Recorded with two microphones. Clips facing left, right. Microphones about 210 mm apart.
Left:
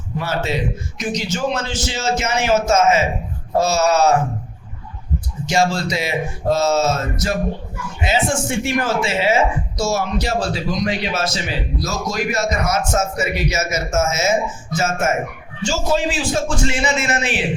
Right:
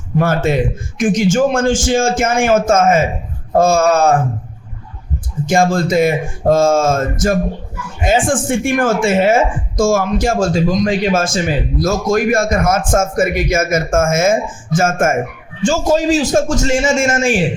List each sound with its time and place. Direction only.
0.2 s a woman's voice: 50° right (ahead or behind)
5.5 s a woman's voice: 50° right (ahead or behind)